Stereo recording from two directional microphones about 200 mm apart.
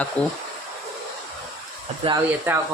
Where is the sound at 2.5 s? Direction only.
10° right (ahead or behind).